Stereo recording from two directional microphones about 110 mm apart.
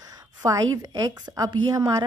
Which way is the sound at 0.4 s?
30° right (ahead or behind).